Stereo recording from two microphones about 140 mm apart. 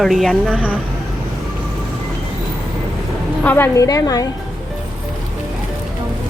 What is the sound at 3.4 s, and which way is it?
Speech, 15° left (ahead or behind).